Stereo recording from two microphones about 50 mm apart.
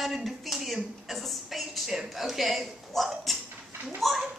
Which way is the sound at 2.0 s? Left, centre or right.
Centre.